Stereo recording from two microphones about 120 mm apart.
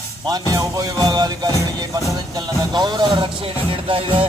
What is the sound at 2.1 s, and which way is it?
Speech, 35° right (ahead or behind).